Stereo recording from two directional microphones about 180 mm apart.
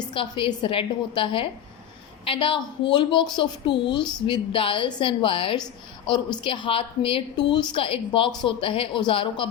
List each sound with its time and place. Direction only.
0.1 s a woman's voice: 25° left (ahead or behind)